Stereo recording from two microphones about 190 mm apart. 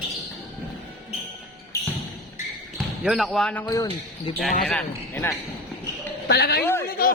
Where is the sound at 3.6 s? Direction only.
20° left (ahead or behind).